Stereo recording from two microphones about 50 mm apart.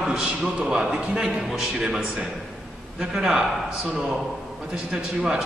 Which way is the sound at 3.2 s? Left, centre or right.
Centre.